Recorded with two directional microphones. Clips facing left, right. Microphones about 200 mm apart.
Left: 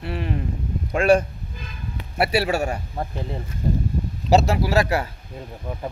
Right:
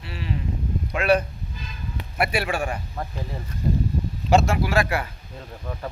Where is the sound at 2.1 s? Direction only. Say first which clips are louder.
Left 4 dB; 35° left (ahead or behind).